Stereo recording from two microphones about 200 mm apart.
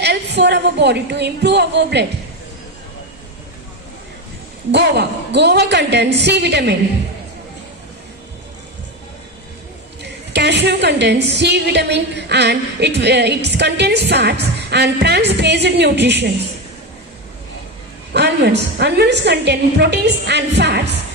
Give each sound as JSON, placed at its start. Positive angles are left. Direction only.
{"t": 0.0, "sound": "a woman's voice", "side_deg": -55}
{"t": 4.7, "sound": "a woman's voice", "side_deg": -60}
{"t": 10.0, "sound": "a woman's voice", "side_deg": -55}
{"t": 18.1, "sound": "a woman's voice", "side_deg": -55}